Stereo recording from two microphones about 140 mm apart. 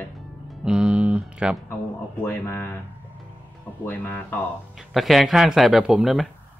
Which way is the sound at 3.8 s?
15° left (ahead or behind).